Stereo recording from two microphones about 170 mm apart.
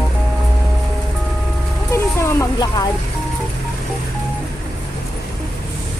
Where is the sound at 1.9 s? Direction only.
15° left (ahead or behind).